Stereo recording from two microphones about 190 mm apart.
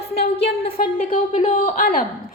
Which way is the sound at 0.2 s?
30° left (ahead or behind).